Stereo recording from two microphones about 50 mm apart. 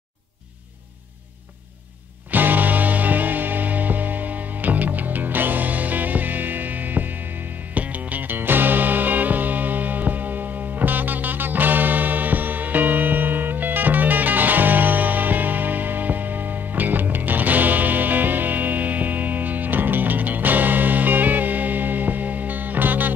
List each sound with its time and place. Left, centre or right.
2.3 s music: right